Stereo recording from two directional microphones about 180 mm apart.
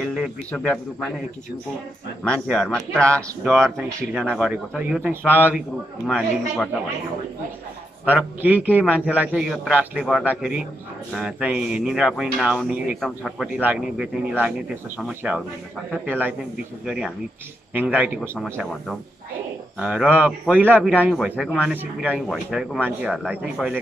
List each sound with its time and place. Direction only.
0.5 s speech: 5° left (ahead or behind)
2.2 s a man's voice: 5° left (ahead or behind)
2.9 s a man's voice: 15° right (ahead or behind)
3.2 s a man's voice: 5° left (ahead or behind)
3.6 s a man's voice: 10° right (ahead or behind)
6.0 s a man's voice: centre (ahead or behind)
8.0 s a man's voice: 10° right (ahead or behind)
18.4 s a man's voice: centre (ahead or behind)